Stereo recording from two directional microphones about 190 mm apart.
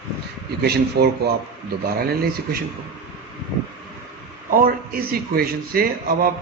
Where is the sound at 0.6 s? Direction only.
60° right (ahead or behind).